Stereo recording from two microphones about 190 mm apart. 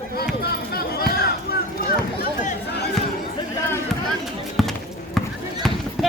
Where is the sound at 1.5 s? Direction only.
55° left (ahead or behind).